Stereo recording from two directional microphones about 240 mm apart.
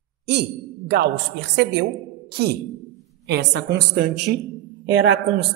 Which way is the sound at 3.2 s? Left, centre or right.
Right.